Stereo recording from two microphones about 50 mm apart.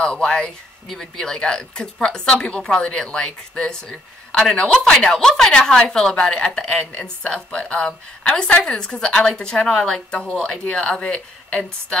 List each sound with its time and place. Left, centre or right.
0.0 s a woman's voice: centre